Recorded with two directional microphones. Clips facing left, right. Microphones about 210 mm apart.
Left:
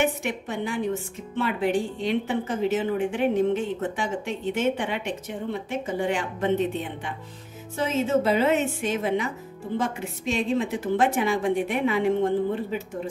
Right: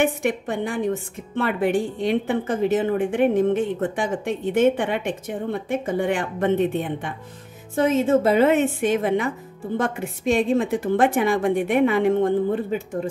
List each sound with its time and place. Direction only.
0.0 s speech: 50° right (ahead or behind)